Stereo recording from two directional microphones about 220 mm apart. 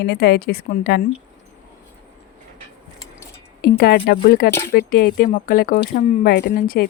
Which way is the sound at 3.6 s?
45° left (ahead or behind).